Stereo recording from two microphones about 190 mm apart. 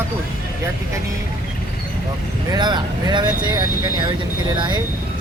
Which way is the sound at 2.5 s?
25° right (ahead or behind).